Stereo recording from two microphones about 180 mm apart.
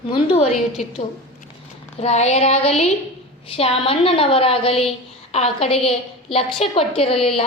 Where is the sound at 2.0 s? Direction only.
40° left (ahead or behind).